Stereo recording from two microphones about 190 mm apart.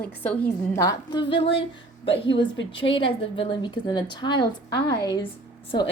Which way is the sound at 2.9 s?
25° left (ahead or behind).